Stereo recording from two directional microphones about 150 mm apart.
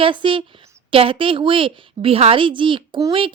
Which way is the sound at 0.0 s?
35° right (ahead or behind).